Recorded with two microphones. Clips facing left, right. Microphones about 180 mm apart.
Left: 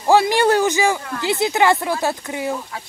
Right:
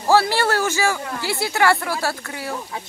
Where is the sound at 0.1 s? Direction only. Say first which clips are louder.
Left 3 dB; 15° left (ahead or behind).